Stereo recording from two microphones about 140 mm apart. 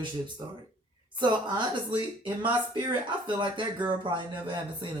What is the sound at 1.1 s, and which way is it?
Speech, 35° right (ahead or behind).